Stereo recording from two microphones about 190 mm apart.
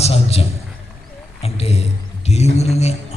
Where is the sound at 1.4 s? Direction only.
30° left (ahead or behind).